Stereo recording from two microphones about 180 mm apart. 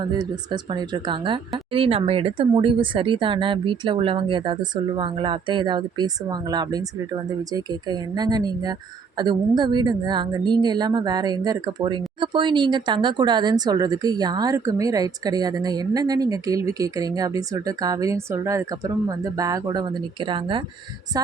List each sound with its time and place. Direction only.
0.0 s a woman's voice: 25° right (ahead or behind)